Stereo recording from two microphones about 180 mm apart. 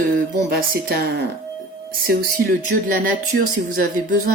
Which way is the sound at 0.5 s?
60° right (ahead or behind).